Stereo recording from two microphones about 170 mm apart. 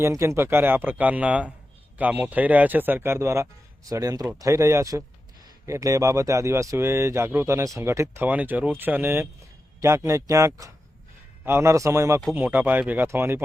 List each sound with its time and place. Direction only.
0.0 s speech: 15° right (ahead or behind)